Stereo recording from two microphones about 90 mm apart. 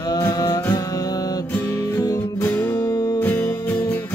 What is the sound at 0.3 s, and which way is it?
Music, 40° left (ahead or behind).